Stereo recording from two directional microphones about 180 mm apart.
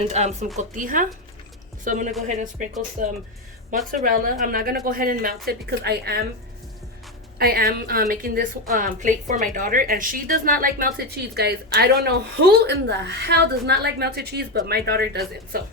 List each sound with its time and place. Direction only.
0.0 s a woman's voice: 40° right (ahead or behind); by 6.2 s 65° right (ahead or behind)
7.3 s a woman's voice: 55° right (ahead or behind)